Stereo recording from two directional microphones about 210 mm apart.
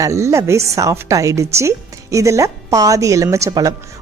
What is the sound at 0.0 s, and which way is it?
A woman's voice, 15° right (ahead or behind).